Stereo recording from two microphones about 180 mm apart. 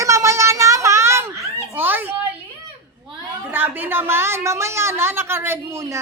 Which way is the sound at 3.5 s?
10° right (ahead or behind).